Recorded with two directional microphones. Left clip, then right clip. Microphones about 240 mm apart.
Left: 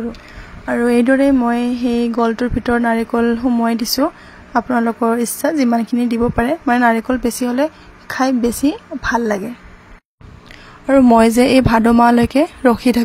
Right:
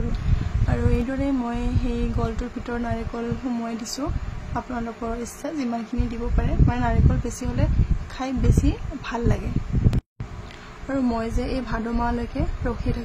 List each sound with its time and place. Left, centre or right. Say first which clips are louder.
0.7 s speech: left 13 dB; left
10.9 s a woman's voice: left 16 dB; left